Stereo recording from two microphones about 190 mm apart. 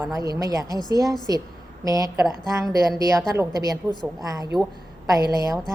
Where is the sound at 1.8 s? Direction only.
20° right (ahead or behind).